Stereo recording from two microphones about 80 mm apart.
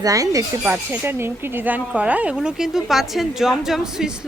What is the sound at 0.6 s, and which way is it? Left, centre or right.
Speech, right.